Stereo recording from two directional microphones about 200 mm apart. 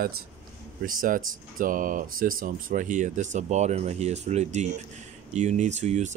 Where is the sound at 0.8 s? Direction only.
45° right (ahead or behind).